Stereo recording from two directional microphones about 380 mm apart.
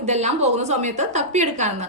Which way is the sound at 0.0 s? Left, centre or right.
Centre.